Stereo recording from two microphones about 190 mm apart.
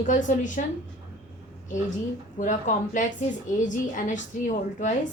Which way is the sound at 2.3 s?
40° left (ahead or behind).